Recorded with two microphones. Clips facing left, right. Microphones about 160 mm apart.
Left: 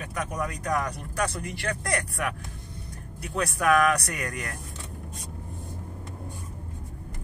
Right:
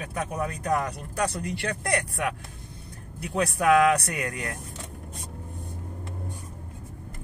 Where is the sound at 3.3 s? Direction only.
20° right (ahead or behind).